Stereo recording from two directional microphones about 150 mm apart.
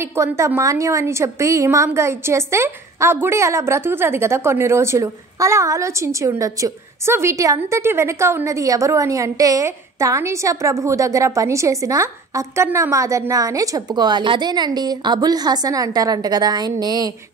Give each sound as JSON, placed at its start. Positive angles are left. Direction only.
{"t": 0.0, "sound": "a woman's voice", "side_deg": -20}